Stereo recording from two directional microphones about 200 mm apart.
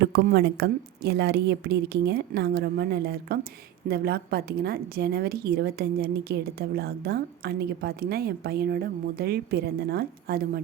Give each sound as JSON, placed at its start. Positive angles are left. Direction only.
{"t": 0.0, "sound": "a woman's voice", "side_deg": -50}